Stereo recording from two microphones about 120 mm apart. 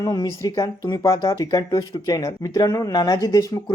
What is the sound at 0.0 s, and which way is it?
Speech, 30° left (ahead or behind).